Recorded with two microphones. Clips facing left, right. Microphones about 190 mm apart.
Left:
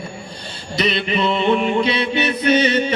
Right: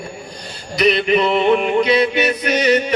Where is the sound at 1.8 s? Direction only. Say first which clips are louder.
Right 4 dB; 25° left (ahead or behind).